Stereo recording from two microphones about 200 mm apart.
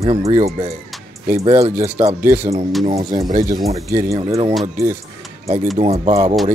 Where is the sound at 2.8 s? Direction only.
30° right (ahead or behind).